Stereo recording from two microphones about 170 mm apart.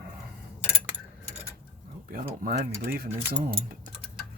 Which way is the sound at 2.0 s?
55° right (ahead or behind).